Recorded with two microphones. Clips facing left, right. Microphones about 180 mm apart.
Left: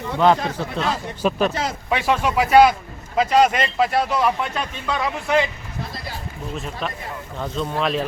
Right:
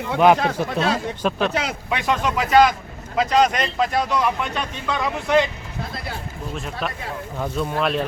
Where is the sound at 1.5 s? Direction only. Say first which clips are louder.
Right 1 dB; 70° right (ahead or behind).